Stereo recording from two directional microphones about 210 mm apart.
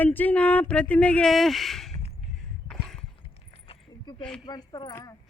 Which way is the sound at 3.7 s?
30° left (ahead or behind).